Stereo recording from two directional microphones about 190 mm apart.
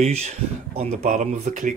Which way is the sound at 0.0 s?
35° right (ahead or behind).